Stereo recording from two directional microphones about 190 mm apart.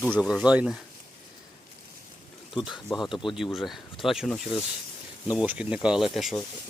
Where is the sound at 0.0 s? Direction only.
5° right (ahead or behind).